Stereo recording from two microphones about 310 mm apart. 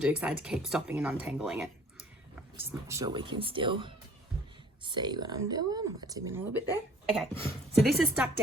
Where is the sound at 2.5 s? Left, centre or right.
Centre.